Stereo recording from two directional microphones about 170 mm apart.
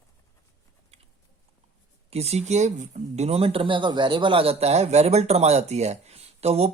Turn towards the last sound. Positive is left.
turn(degrees=-35)  # may be behind; listen again after turning